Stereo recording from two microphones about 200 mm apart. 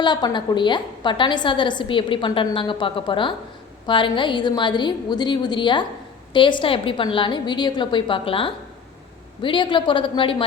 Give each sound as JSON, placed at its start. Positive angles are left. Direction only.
{"t": 0.0, "sound": "a woman's voice", "side_deg": 20}